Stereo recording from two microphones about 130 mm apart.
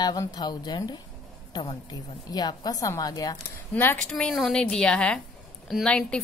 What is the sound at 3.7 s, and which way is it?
A woman's voice, 15° left (ahead or behind).